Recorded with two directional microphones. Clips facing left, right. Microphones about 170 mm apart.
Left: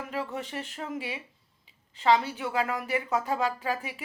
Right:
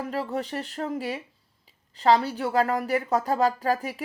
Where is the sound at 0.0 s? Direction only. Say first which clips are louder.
Right 5 dB; 35° right (ahead or behind).